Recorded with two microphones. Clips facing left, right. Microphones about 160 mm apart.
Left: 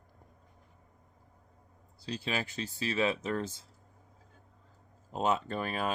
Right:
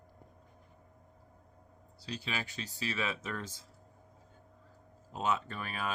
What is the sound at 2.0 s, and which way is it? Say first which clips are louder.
Speech: left 4 dB; 35° left (ahead or behind).